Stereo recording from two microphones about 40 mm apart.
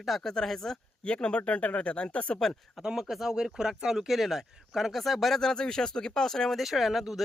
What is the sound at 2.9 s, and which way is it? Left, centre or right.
Speech, centre.